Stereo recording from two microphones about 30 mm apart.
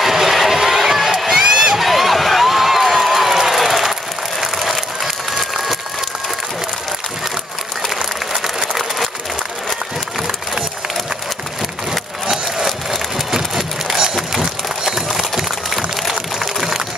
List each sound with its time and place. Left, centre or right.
0.0 s crowd: centre
1.4 s crowd: right
1.8 s a sound: centre
4.4 s applause: centre
7.8 s applause: centre
12.6 s a sound: centre